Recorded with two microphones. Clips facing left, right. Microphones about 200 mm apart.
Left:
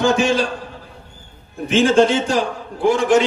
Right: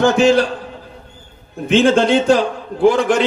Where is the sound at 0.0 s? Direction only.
55° right (ahead or behind).